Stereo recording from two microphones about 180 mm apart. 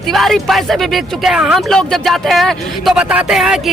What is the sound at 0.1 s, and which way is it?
Speech, centre (ahead or behind).